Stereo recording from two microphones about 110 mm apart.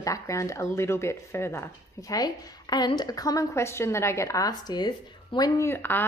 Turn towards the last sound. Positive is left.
turn(degrees=20)  # may be behind; listen again after turning